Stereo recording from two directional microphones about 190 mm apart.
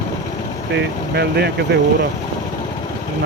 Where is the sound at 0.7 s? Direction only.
60° right (ahead or behind).